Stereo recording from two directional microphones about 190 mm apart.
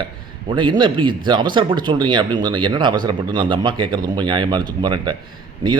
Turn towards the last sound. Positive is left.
turn(degrees=-25)  # may be behind; listen again after turning